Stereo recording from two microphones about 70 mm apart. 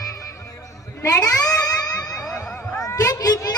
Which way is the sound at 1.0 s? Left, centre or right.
Left.